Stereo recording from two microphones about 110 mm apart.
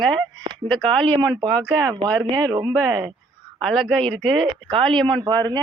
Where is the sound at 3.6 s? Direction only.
Centre (ahead or behind).